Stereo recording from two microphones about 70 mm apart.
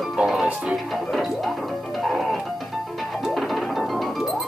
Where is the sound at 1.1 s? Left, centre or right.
Centre.